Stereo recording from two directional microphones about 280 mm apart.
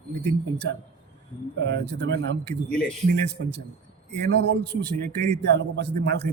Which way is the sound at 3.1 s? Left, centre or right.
Right.